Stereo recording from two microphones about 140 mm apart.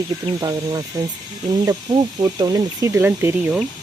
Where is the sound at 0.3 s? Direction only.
30° right (ahead or behind).